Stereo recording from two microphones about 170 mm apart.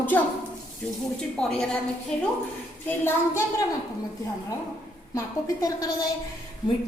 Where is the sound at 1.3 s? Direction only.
5° left (ahead or behind).